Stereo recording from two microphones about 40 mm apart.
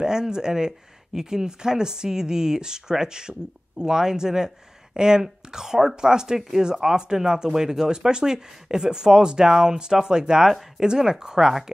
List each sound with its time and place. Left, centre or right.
0.0 s speech: centre